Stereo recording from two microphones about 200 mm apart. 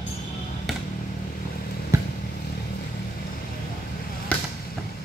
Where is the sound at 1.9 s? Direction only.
15° right (ahead or behind).